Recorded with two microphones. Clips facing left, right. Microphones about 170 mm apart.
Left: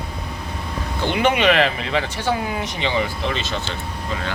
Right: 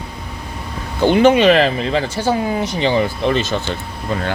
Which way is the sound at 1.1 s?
35° right (ahead or behind).